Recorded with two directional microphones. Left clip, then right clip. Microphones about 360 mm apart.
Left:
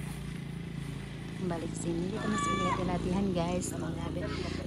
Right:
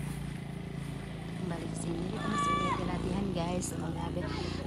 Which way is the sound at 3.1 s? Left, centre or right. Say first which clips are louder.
Left 2 dB; centre.